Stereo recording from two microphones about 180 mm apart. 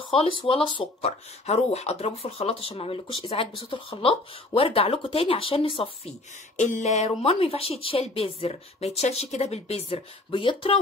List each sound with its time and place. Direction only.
0.1 s speech: 30° left (ahead or behind)
6.6 s speech: 40° left (ahead or behind)